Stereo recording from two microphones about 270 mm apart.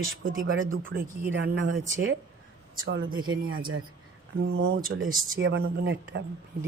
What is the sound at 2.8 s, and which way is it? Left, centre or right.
Speech, right.